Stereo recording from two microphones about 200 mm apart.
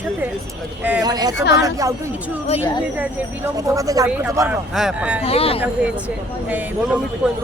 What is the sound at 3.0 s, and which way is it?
Speech, 15° right (ahead or behind).